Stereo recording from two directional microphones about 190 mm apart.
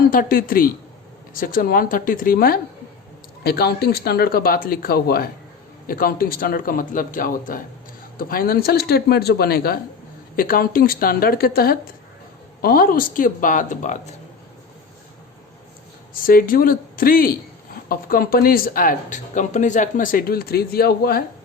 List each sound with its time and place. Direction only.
0.1 s speech: 50° left (ahead or behind)
16.2 s speech: 50° left (ahead or behind)